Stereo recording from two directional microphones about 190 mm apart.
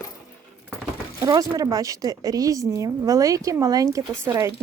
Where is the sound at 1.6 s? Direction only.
20° right (ahead or behind).